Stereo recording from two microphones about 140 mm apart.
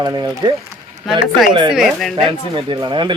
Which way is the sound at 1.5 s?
35° right (ahead or behind).